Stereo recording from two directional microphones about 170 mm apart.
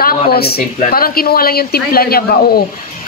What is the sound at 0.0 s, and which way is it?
A woman's voice, 65° left (ahead or behind).